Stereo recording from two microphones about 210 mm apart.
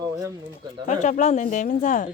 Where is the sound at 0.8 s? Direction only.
35° left (ahead or behind).